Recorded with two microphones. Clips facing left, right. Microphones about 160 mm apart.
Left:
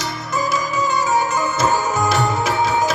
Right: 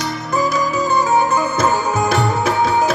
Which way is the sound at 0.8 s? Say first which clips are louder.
Right 3 dB; 60° right (ahead or behind).